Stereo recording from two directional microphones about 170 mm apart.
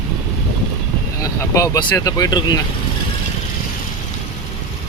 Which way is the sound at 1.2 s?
20° left (ahead or behind).